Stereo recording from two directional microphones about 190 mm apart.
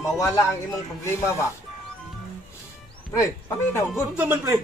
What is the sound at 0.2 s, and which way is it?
Speech, 15° left (ahead or behind).